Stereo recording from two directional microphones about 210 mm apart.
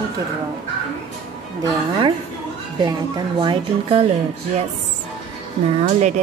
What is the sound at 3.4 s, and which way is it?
Speech, 25° right (ahead or behind).